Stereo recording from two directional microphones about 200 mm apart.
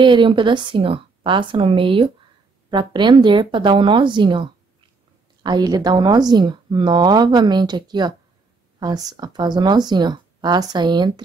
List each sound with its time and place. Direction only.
0.0 s speech: 25° right (ahead or behind)